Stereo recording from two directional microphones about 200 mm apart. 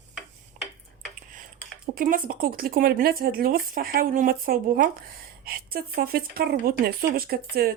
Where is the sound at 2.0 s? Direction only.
45° right (ahead or behind).